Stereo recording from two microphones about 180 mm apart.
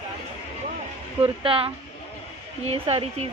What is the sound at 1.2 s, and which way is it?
A woman's voice, 30° right (ahead or behind).